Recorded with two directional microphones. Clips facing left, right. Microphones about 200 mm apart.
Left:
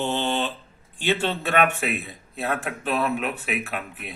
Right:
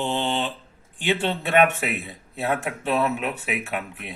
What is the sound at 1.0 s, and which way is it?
A man's voice, 15° right (ahead or behind).